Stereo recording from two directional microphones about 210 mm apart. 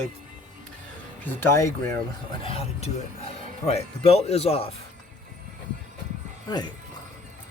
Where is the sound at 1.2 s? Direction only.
10° left (ahead or behind).